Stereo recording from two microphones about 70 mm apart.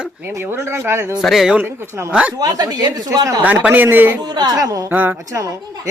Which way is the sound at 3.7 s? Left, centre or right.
Right.